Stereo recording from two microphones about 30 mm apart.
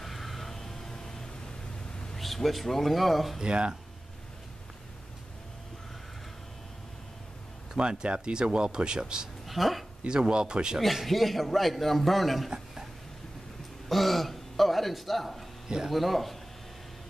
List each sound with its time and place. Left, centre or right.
0.0 s a sound: centre
2.1 s speech: centre
3.4 s speech: right
7.8 s speech: right
9.5 s a man's voice: centre
10.0 s speech: right
11.1 s a man's voice: centre
12.4 s a sound: centre
13.8 s a sound: centre
15.9 s a man's voice: centre